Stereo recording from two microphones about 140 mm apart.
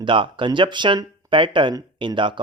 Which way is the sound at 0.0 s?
35° right (ahead or behind).